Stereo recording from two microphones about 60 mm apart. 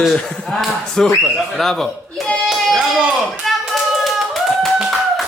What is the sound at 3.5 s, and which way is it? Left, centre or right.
Clapping, centre.